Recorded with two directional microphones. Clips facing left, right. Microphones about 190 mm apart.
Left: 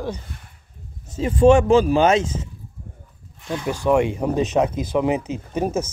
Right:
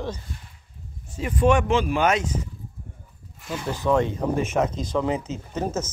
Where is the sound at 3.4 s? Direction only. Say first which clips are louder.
Left 4 dB; 5° right (ahead or behind).